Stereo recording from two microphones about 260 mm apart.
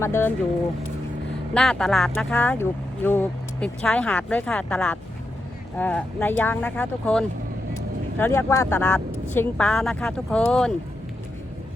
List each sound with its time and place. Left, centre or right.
0.0 s speech: centre
1.5 s speech: centre